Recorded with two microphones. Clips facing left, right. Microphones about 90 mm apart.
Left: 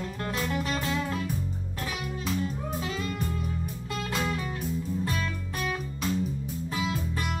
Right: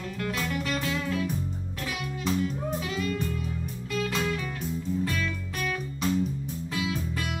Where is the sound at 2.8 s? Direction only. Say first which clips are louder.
Right 2 dB; 30° left (ahead or behind).